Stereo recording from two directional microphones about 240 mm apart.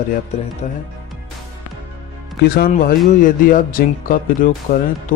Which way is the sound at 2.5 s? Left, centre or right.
Left.